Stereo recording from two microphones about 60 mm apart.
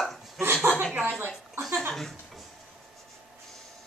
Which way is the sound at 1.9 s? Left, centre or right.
Centre.